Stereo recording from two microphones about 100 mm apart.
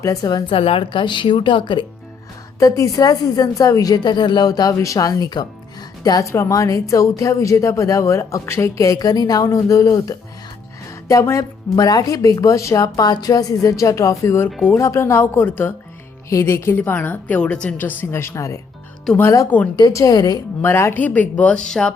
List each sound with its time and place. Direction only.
0.0 s a woman's voice: 40° left (ahead or behind)
0.5 s speech: 65° left (ahead or behind)
2.6 s a woman's voice: 30° left (ahead or behind)
19.5 s speech: 15° left (ahead or behind)
19.9 s a woman's voice: 30° left (ahead or behind)
20.1 s a woman's voice: 45° left (ahead or behind)
20.6 s speech: 25° left (ahead or behind); by 21.9 s 5° left (ahead or behind)